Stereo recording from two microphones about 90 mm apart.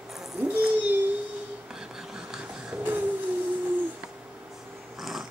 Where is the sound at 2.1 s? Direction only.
5° right (ahead or behind).